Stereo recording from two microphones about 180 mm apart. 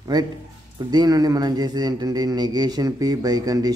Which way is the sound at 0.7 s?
20° right (ahead or behind).